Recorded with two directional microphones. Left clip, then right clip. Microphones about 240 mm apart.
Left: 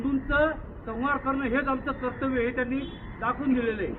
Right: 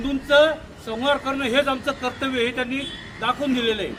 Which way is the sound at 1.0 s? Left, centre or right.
Right.